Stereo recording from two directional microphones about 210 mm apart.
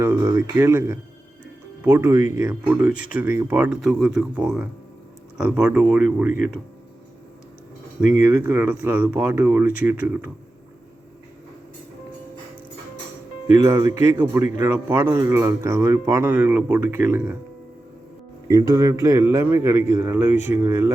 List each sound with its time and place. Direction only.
0.0 s speech: 15° right (ahead or behind)
6.2 s speech: 40° left (ahead or behind)
8.4 s speech: 10° right (ahead or behind)
13.6 s speech: 15° right (ahead or behind)
18.4 s speech: 15° right (ahead or behind)